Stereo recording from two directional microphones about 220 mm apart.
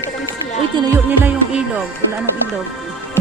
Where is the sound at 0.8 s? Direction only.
10° right (ahead or behind).